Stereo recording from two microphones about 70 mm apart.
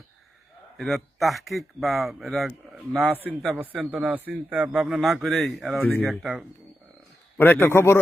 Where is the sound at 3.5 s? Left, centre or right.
Right; by 6.3 s centre.